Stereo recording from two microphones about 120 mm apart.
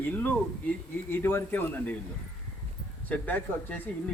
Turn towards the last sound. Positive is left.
turn(degrees=15)  # may be behind; listen again after turning